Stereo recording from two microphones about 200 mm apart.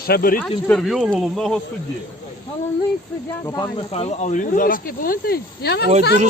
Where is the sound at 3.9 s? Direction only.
30° left (ahead or behind); by 5.8 s 50° left (ahead or behind).